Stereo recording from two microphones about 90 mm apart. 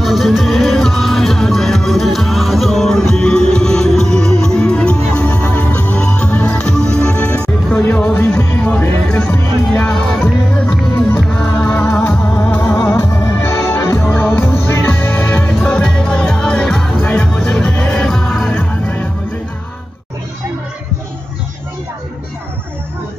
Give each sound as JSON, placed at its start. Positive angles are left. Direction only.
{"t": 0.0, "sound": "music", "side_deg": 0}
{"t": 10.1, "sound": "music", "side_deg": 5}
{"t": 11.7, "sound": "music", "side_deg": 20}
{"t": 12.9, "sound": "music", "side_deg": 30}
{"t": 17.0, "sound": "music", "side_deg": 15}
{"t": 17.5, "sound": "music", "side_deg": 5}
{"t": 18.5, "sound": "music", "side_deg": 20}